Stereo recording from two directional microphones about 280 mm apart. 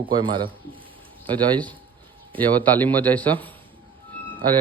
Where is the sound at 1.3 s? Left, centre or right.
Centre.